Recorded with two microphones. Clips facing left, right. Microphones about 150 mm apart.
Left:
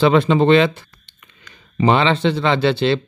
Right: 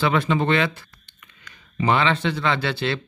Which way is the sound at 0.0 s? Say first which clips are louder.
Left 7 dB; 25° left (ahead or behind).